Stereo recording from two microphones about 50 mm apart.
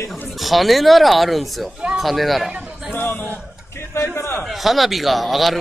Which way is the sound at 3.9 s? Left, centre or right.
Left.